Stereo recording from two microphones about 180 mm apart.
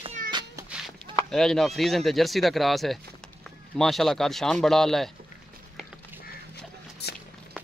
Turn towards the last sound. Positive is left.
turn(degrees=65)  # may be behind; listen again after turning